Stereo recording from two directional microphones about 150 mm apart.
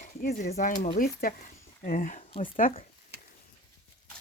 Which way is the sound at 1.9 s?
65° left (ahead or behind).